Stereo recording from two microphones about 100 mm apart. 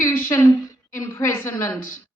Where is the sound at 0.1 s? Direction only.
25° left (ahead or behind).